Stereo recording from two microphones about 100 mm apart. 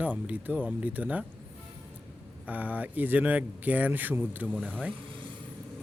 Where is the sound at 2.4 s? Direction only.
15° right (ahead or behind).